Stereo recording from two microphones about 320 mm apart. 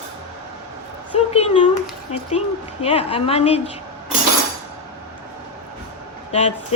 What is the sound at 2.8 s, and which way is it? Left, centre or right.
Speech, centre.